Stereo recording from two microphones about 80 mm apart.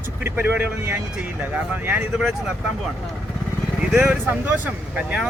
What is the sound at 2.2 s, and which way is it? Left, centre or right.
Speech, centre.